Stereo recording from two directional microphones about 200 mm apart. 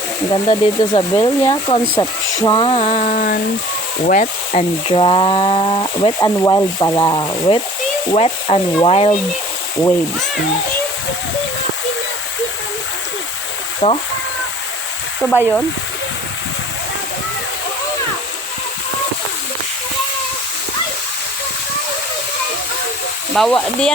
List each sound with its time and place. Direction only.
0.3 s speech: 20° left (ahead or behind); by 4.6 s 40° left (ahead or behind)
4.9 s speech: 25° left (ahead or behind)
13.8 s speech: 30° left (ahead or behind)
15.2 s speech: 10° left (ahead or behind)
23.3 s speech: 5° left (ahead or behind)